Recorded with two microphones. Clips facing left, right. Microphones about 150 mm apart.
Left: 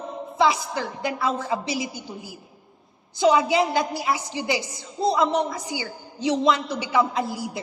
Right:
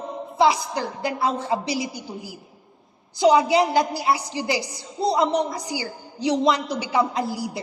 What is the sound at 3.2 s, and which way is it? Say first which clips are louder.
A woman's voice: right 2 dB; 35° right (ahead or behind).